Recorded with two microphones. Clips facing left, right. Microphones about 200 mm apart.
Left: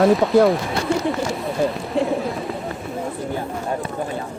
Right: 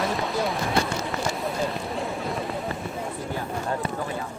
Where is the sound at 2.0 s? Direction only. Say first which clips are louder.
Left 7 dB; centre (ahead or behind).